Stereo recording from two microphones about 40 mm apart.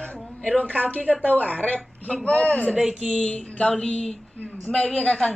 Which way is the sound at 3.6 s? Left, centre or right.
Centre.